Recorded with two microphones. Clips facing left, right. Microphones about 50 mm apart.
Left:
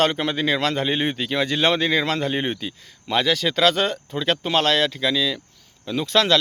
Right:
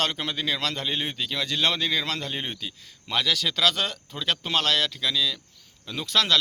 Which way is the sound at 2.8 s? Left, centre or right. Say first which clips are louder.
Left 5 dB; centre.